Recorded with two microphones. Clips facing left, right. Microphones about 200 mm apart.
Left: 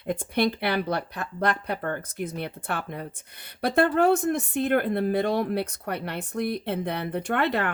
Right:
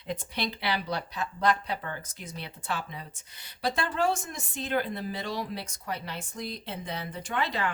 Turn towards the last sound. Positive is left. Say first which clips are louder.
# left 6 dB
turn(degrees=60)  # may be behind; listen again after turning